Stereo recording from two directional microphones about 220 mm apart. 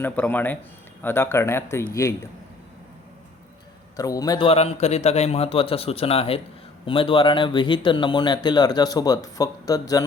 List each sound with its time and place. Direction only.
0.0 s speech: 10° left (ahead or behind)
3.9 s a man's voice: 15° left (ahead or behind)